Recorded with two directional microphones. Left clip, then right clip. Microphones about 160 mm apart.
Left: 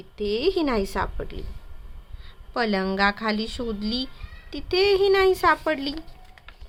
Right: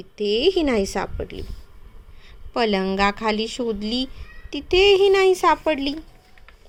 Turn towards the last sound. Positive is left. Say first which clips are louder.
# right 3 dB
turn(degrees=-15)  # may be behind; listen again after turning